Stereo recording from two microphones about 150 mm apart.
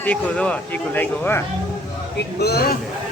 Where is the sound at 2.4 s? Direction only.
90° left.